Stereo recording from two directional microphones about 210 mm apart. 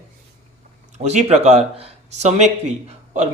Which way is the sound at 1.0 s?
35° right (ahead or behind).